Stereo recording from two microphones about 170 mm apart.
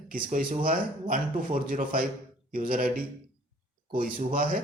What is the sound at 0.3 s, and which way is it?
Speech, 50° right (ahead or behind).